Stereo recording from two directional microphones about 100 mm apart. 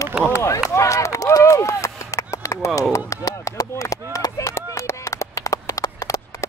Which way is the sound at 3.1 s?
35° left (ahead or behind).